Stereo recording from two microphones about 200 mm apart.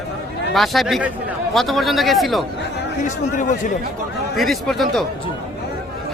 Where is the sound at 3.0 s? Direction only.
40° left (ahead or behind).